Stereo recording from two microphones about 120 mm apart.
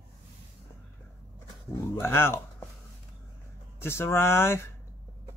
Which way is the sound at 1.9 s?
20° left (ahead or behind).